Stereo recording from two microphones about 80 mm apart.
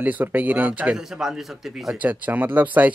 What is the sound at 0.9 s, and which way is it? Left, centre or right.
Speech, centre.